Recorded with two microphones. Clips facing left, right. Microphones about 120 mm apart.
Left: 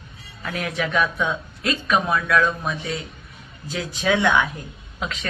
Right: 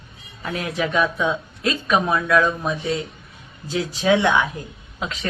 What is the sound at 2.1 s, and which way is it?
Speech, 25° right (ahead or behind).